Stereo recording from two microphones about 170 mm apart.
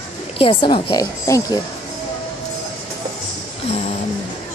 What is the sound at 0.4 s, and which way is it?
Speech, 30° left (ahead or behind).